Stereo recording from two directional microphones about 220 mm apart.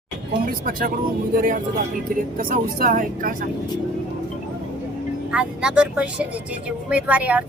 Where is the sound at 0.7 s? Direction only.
40° right (ahead or behind).